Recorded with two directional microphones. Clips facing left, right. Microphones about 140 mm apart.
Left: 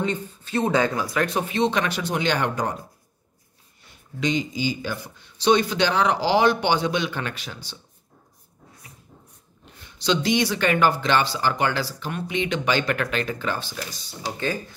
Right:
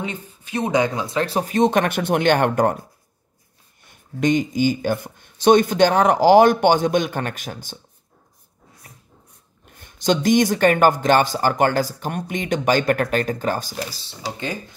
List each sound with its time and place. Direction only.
0.0 s speech: 10° right (ahead or behind); by 2.8 s 55° right (ahead or behind)
3.8 s speech: 50° right (ahead or behind)
9.7 s speech: 50° right (ahead or behind)
13.7 s speech: 30° right (ahead or behind)